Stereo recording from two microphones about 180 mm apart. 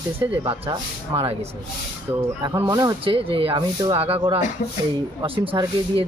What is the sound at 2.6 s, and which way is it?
Speech, 25° right (ahead or behind).